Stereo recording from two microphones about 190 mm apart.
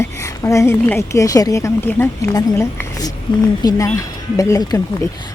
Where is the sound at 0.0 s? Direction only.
15° left (ahead or behind).